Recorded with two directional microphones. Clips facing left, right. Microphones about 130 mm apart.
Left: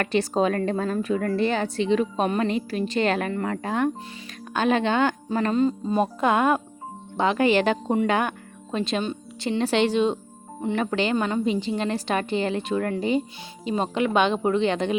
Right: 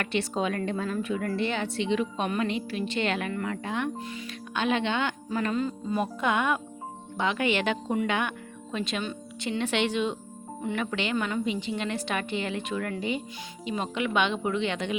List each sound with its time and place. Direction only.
0.0 s a woman's voice: 40° left (ahead or behind)